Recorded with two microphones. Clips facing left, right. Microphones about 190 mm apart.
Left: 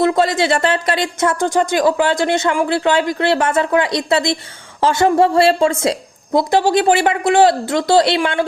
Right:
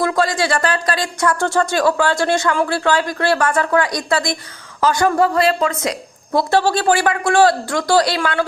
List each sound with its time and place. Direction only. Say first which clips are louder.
0.0 s speech: left 3 dB; 25° left (ahead or behind)
6.5 s speech: left 2 dB; 15° left (ahead or behind)